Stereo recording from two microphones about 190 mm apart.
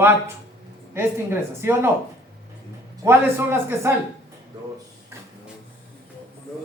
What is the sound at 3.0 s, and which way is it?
Speech, 10° right (ahead or behind).